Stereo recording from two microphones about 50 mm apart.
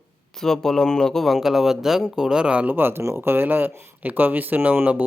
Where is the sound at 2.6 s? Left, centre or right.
Right.